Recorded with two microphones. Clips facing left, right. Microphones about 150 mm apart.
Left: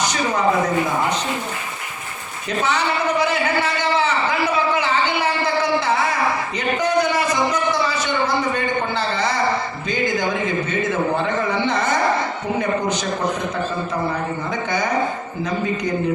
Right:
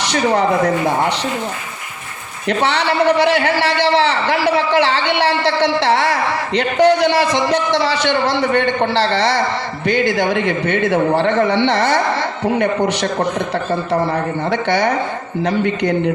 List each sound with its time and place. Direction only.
0.1 s a man's voice: 75° right (ahead or behind)
2.5 s a man's voice: 70° right (ahead or behind)
14.5 s a man's voice: 70° right (ahead or behind)